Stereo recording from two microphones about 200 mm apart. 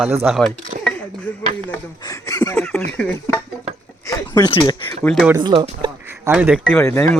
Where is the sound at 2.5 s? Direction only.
5° left (ahead or behind).